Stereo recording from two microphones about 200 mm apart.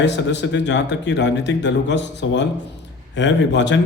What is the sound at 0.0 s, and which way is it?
A man's voice, 60° left (ahead or behind).